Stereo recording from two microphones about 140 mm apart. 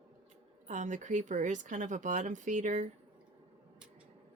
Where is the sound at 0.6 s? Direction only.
60° right (ahead or behind).